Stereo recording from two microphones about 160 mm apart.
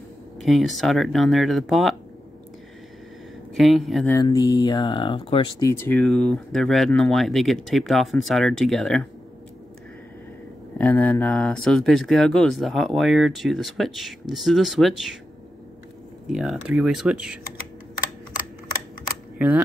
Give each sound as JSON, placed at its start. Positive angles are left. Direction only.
{"t": 0.4, "sound": "speech", "side_deg": 0}
{"t": 3.5, "sound": "speech", "side_deg": 0}
{"t": 4.1, "sound": "speech", "side_deg": 20}
{"t": 5.7, "sound": "speech", "side_deg": 15}
{"t": 6.0, "sound": "speech", "side_deg": 0}
{"t": 10.8, "sound": "speech", "side_deg": 10}
{"t": 16.3, "sound": "speech", "side_deg": 0}
{"t": 19.3, "sound": "camera", "side_deg": -10}